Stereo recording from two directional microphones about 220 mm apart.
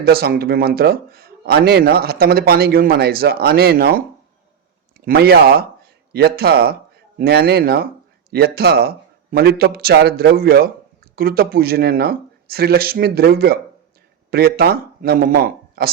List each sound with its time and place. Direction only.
0.0 s speech: 45° right (ahead or behind)
5.0 s speech: 45° right (ahead or behind)